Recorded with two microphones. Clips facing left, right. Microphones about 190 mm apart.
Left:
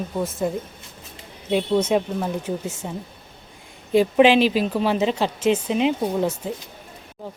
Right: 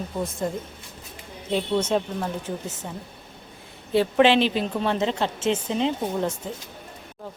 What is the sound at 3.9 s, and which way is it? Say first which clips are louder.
Speech: left 3 dB; 15° left (ahead or behind).